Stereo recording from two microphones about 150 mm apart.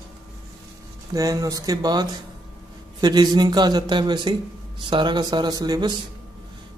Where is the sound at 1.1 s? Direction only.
25° right (ahead or behind).